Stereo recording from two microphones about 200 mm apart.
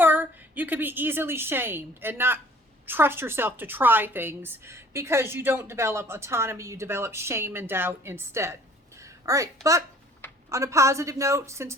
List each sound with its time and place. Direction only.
0.0 s a woman's voice: 10° right (ahead or behind)
9.0 s a sound: 15° right (ahead or behind)
10.5 s a woman's voice: 15° right (ahead or behind)